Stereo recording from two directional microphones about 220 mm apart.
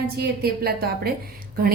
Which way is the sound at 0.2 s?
45° right (ahead or behind).